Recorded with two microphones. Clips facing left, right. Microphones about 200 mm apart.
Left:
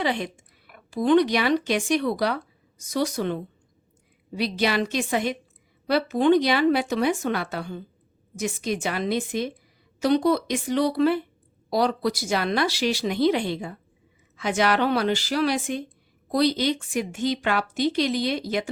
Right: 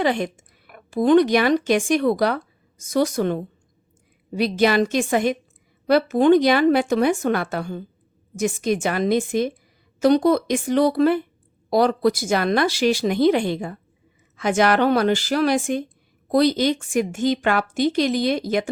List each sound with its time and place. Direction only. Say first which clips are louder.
0.0 s a woman's voice: right 5 dB; 50° right (ahead or behind)